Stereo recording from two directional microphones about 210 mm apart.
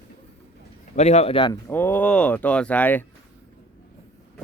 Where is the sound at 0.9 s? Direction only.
30° left (ahead or behind).